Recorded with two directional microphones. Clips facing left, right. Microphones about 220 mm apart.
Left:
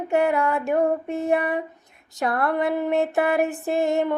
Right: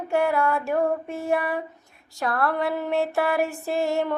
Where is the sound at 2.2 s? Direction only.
20° left (ahead or behind).